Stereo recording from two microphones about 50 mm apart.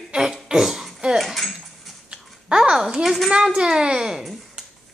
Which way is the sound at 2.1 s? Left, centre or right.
Centre.